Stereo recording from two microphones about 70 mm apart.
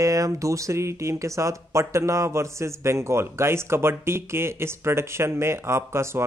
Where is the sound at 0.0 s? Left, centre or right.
Right.